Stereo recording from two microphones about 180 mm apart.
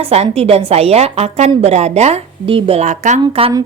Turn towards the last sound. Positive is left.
turn(degrees=-30)  # may be behind; listen again after turning